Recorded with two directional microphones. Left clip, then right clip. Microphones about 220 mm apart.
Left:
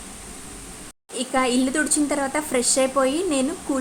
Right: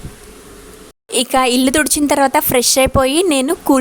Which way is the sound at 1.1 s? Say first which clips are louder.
Right 8 dB; 50° right (ahead or behind).